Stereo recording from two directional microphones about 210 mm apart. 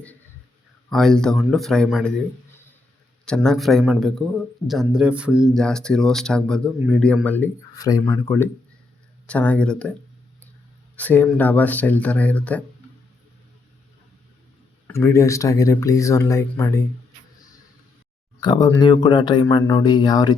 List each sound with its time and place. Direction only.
0.9 s a man's voice: centre (ahead or behind)
3.2 s a man's voice: 5° left (ahead or behind)
10.9 s speech: 10° left (ahead or behind)
14.8 s speech: 10° left (ahead or behind)
18.3 s speech: 20° left (ahead or behind)